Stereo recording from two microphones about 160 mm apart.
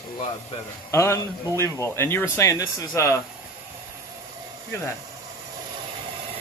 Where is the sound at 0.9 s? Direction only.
15° left (ahead or behind).